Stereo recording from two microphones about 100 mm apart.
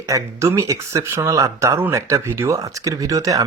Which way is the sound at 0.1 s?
30° right (ahead or behind).